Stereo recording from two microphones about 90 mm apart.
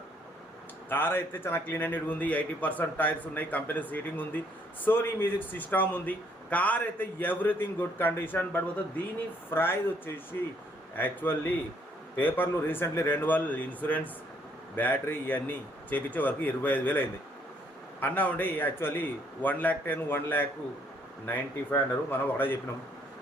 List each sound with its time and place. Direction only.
0.9 s speech: 25° left (ahead or behind)
10.9 s speech: 20° left (ahead or behind)